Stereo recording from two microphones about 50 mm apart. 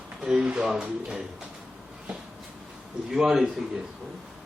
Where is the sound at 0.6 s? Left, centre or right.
Centre.